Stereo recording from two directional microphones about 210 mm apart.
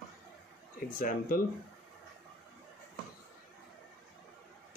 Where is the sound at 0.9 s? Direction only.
40° left (ahead or behind).